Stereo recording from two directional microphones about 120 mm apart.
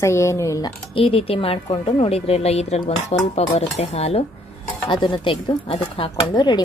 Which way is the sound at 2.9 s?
80° left.